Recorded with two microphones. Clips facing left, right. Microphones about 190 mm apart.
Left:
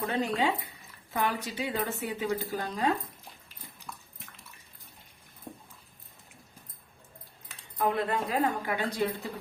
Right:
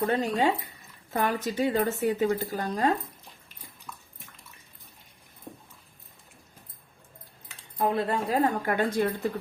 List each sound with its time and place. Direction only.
0.0 s speech: 45° right (ahead or behind)
7.8 s speech: 35° right (ahead or behind); by 9.3 s 50° right (ahead or behind)